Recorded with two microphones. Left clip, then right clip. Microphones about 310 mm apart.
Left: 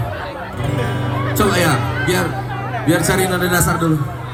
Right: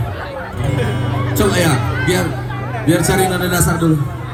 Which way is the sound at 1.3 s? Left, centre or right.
Centre.